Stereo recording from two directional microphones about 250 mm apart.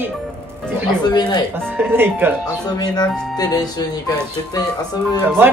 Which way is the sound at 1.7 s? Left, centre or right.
Centre.